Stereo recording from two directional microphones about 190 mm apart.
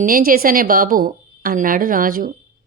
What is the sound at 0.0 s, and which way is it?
Speech, 45° right (ahead or behind).